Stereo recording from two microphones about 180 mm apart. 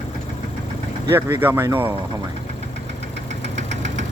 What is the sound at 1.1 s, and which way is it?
Speech, 10° right (ahead or behind).